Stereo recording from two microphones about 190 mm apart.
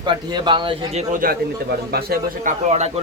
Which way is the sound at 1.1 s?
50° right (ahead or behind).